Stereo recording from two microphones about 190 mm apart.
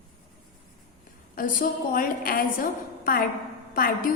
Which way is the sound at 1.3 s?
45° left (ahead or behind).